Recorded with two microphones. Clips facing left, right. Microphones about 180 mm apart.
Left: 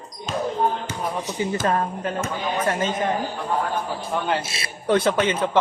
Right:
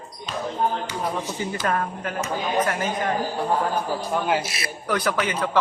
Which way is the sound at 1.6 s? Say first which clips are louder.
Even; 25° left (ahead or behind).